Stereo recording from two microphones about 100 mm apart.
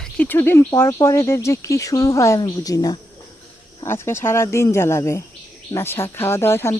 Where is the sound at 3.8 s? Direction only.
25° left (ahead or behind).